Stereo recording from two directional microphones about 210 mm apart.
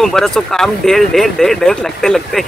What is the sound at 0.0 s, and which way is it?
Speech, centre (ahead or behind).